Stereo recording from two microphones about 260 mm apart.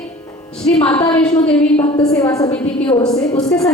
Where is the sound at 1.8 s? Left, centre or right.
Centre.